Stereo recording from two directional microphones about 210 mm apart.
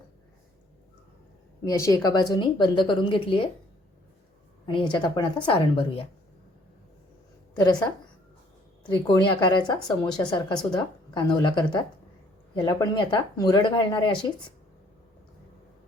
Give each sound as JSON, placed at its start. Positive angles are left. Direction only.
{"t": 1.6, "sound": "a woman's voice", "side_deg": 15}
{"t": 4.6, "sound": "a woman's voice", "side_deg": 20}
{"t": 7.5, "sound": "a woman's voice", "side_deg": 20}
{"t": 8.8, "sound": "a woman's voice", "side_deg": 20}